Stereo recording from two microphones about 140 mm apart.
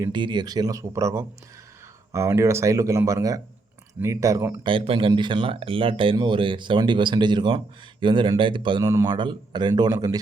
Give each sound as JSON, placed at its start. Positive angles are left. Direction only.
{"t": 0.1, "sound": "speech", "side_deg": -35}
{"t": 4.6, "sound": "speech", "side_deg": -40}
{"t": 8.8, "sound": "speech", "side_deg": -20}
{"t": 9.0, "sound": "speech", "side_deg": -35}